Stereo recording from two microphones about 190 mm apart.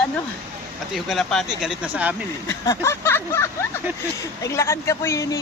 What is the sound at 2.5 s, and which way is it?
Speech, 15° left (ahead or behind).